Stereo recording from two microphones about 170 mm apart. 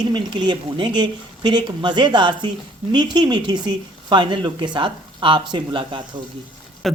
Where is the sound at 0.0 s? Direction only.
25° right (ahead or behind).